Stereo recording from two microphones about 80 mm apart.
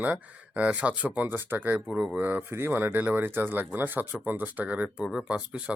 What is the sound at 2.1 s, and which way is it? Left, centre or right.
Speech, right.